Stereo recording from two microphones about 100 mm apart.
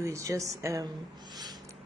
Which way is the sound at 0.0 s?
30° right (ahead or behind).